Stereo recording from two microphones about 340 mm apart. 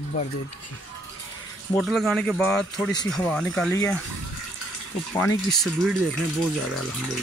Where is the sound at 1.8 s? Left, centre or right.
Centre.